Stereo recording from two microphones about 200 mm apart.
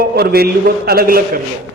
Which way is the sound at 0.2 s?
50° right (ahead or behind).